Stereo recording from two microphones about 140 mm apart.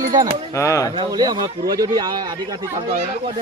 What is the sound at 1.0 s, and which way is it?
Speech, 30° right (ahead or behind).